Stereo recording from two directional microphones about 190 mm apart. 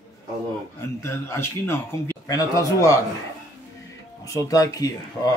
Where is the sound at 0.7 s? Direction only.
15° left (ahead or behind).